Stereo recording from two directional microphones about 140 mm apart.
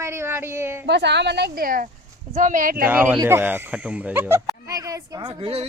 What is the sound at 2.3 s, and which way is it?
Speech, 70° right (ahead or behind).